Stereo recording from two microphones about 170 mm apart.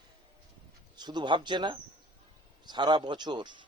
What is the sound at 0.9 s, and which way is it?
A man's voice, 25° right (ahead or behind).